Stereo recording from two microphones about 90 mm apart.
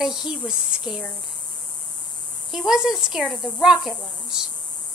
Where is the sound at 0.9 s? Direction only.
5° right (ahead or behind).